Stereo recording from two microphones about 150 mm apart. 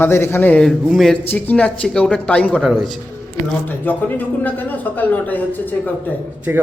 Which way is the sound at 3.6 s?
10° left (ahead or behind).